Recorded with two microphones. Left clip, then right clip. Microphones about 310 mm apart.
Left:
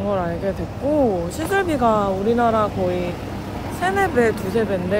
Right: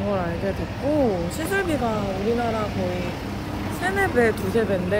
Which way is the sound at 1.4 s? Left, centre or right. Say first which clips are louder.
Left 6 dB; centre.